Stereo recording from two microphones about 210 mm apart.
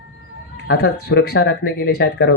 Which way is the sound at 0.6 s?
50° left (ahead or behind).